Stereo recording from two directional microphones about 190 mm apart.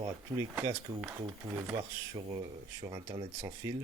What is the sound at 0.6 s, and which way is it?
Speech, 15° right (ahead or behind).